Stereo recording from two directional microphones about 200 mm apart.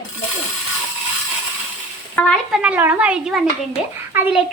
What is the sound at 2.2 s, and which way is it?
Speech, 5° left (ahead or behind).